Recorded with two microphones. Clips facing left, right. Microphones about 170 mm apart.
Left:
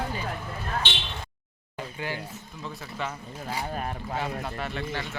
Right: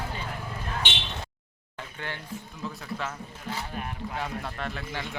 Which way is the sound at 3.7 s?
40° left (ahead or behind).